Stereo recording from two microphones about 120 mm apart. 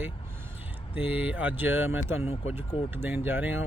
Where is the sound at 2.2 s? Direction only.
60° left (ahead or behind).